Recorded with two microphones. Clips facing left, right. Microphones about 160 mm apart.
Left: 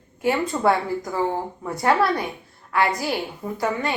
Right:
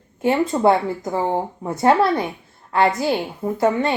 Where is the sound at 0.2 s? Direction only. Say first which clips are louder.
Right 4 dB; 25° right (ahead or behind).